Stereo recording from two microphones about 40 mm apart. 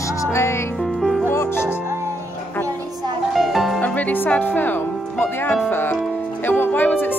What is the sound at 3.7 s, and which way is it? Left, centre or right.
Music, left.